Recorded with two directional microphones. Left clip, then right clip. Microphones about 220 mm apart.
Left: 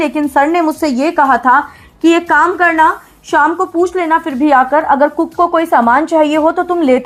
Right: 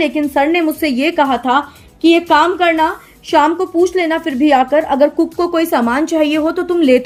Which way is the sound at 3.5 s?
10° left (ahead or behind).